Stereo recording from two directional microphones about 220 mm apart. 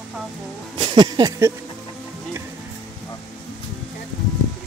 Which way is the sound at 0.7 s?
20° right (ahead or behind).